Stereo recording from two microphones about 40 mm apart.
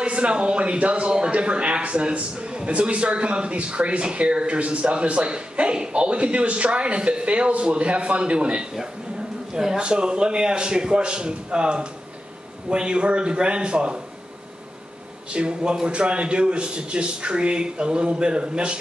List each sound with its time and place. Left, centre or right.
0.0 s a man's voice: right
9.5 s a man's voice: centre
9.8 s a man's voice: right
15.2 s a man's voice: right